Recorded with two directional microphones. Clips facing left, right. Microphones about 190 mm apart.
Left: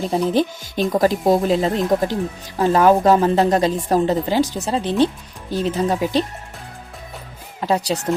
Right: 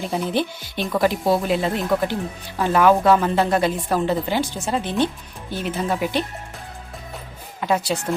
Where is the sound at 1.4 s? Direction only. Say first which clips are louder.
Left 4 dB; 35° left (ahead or behind).